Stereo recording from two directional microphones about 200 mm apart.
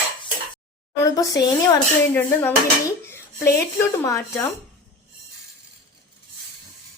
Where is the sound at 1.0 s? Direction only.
15° left (ahead or behind).